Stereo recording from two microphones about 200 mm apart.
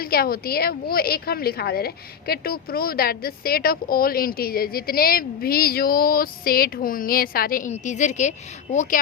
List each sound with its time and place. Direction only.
0.0 s a woman's voice: 50° left (ahead or behind)